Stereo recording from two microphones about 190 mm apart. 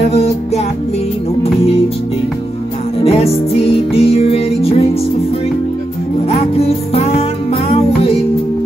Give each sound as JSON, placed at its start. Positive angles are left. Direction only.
{"t": 0.0, "sound": "music", "side_deg": 35}
{"t": 3.0, "sound": "music", "side_deg": 30}
{"t": 6.2, "sound": "music", "side_deg": 30}